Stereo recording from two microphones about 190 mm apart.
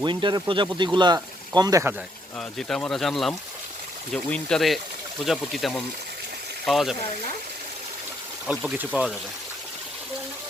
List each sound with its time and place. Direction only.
0.0 s speech: 25° right (ahead or behind)
2.4 s speech: centre (ahead or behind)
8.4 s speech: 5° right (ahead or behind)